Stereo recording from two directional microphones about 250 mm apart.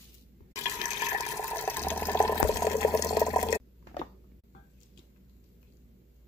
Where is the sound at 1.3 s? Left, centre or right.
Centre.